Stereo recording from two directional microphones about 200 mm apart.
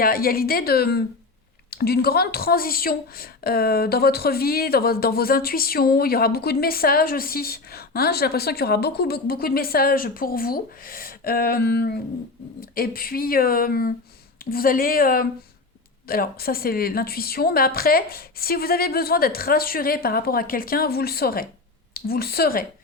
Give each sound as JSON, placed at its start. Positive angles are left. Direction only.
{"t": 0.0, "sound": "a woman's voice", "side_deg": 45}